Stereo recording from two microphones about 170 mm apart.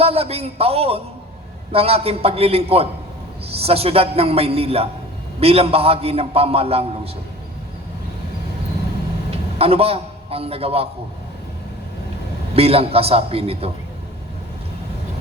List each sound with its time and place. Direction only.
0.0 s a man's voice: 35° right (ahead or behind)
9.6 s a man's voice: 35° right (ahead or behind)
12.5 s a man's voice: 35° right (ahead or behind)